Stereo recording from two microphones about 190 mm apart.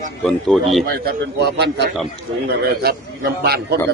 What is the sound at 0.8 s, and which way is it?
A man's voice, 55° right (ahead or behind).